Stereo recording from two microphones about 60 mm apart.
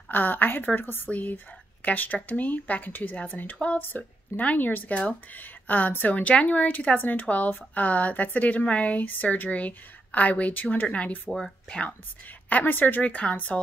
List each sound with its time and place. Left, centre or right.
0.1 s a woman's voice: left
11.2 s speech: centre
12.4 s speech: left